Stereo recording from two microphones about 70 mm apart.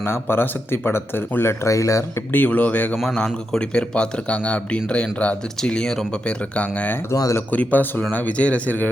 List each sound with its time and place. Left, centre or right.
0.0 s speech: left
1.6 s speech: left
2.3 s speech: left
3.0 s speech: centre
7.1 s speech: left
7.5 s speech: left